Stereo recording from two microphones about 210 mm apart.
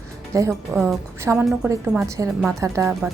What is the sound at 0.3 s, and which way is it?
Speech, 15° right (ahead or behind).